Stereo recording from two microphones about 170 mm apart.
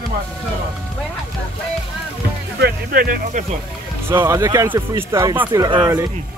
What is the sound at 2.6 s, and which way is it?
Speech, 55° right (ahead or behind).